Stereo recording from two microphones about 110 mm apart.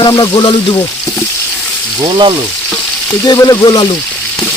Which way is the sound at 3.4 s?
35° left (ahead or behind).